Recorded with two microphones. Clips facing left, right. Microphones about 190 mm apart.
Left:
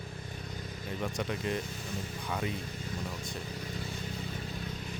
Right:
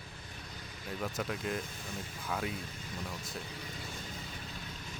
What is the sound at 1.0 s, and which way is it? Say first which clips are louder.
Speech: left 2 dB; centre (ahead or behind).